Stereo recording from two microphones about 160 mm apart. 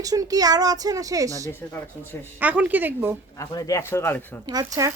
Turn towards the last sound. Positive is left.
turn(degrees=-20)  # may be behind; listen again after turning